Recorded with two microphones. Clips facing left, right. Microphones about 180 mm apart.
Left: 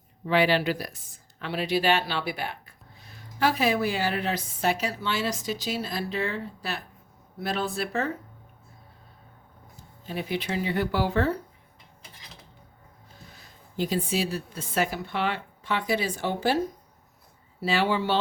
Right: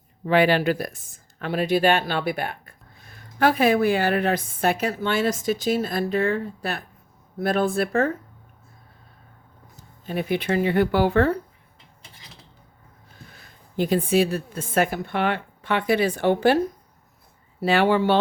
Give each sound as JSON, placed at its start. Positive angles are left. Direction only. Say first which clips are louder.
{"t": 0.3, "sound": "speech", "louder": "right 4 dB", "side_deg": -50}
{"t": 10.1, "sound": "speech", "louder": "right 6 dB", "side_deg": -55}
{"t": 13.3, "sound": "a woman's voice", "louder": "right 6 dB", "side_deg": -60}
{"t": 17.6, "sound": "speech", "louder": "right 6 dB", "side_deg": -55}